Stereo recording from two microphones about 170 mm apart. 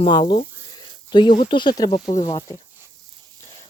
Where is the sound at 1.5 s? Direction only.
25° left (ahead or behind).